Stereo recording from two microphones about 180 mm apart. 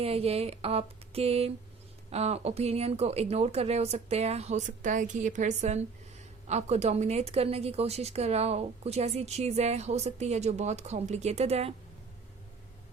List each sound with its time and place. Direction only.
0.0 s a woman's voice: 35° right (ahead or behind)